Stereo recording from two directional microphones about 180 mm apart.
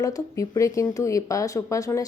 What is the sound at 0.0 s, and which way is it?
Speech, 20° left (ahead or behind).